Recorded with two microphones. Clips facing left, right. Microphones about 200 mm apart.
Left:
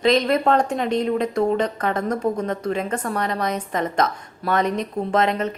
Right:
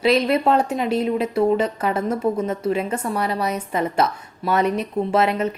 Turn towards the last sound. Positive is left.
turn(degrees=-10)  # may be behind; listen again after turning